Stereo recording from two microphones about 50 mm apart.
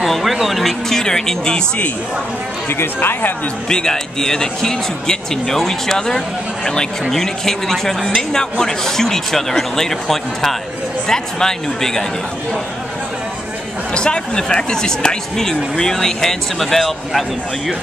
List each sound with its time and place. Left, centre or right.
0.0 s speech: centre
0.8 s speech: centre
2.7 s speech: left
3.6 s speech: centre
13.9 s speech: centre